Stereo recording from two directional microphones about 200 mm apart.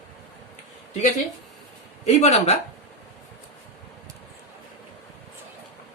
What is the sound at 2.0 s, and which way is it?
Speech, 35° left (ahead or behind).